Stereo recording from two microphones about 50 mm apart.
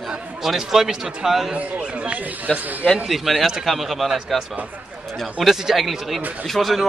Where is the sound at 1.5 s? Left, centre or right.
Right.